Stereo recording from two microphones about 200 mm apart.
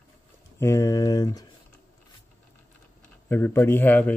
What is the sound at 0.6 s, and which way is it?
Speech, 15° left (ahead or behind).